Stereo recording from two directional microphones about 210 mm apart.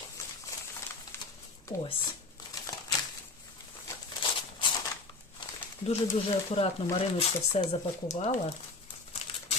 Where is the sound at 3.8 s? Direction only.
20° left (ahead or behind).